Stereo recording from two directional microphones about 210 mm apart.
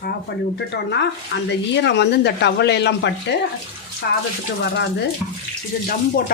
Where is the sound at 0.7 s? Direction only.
55° left (ahead or behind).